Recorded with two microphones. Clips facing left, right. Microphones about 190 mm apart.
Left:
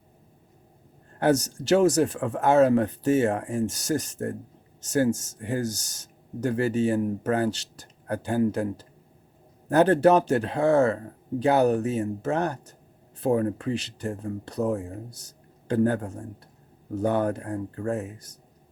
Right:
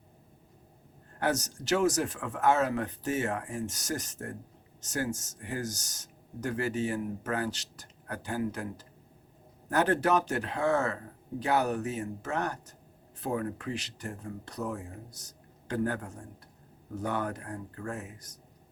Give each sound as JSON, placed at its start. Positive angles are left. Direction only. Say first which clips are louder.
{"t": 1.2, "sound": "speech", "louder": "left 8 dB", "side_deg": 30}